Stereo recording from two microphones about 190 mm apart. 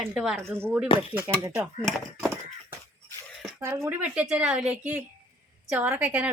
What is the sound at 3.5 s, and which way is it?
A woman's voice, 10° right (ahead or behind).